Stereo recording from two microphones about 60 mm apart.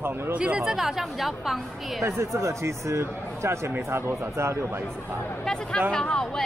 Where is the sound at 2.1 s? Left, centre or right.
Right.